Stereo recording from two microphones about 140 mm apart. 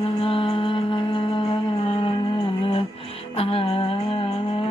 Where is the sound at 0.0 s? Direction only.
40° left (ahead or behind).